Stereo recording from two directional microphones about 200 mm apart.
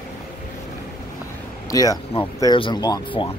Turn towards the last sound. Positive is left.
turn(degrees=25)  # may be behind; listen again after turning